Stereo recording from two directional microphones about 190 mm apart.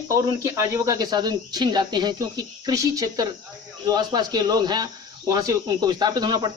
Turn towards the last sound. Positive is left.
turn(degrees=-20)  # may be behind; listen again after turning